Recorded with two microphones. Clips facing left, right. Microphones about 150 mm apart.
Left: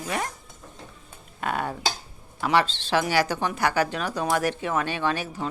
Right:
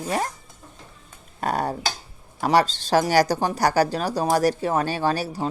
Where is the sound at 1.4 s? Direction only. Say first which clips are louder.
Right 4 dB; 40° right (ahead or behind).